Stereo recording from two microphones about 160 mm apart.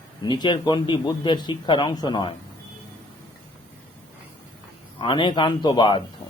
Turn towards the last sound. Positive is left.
turn(degrees=30)  # may be behind; listen again after turning